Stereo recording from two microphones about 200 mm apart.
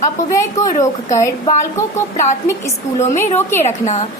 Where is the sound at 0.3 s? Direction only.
15° left (ahead or behind).